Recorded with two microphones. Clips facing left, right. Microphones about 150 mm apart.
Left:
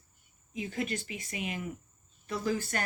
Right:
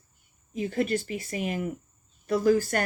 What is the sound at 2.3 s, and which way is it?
Speech, 55° right (ahead or behind).